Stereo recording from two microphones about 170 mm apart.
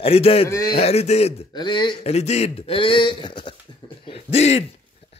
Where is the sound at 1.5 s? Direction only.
25° left (ahead or behind).